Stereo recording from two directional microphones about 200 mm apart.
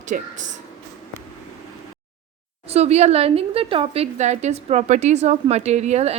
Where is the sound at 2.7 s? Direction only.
30° right (ahead or behind).